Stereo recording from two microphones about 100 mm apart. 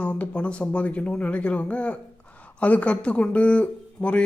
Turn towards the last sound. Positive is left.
turn(degrees=10)  # may be behind; listen again after turning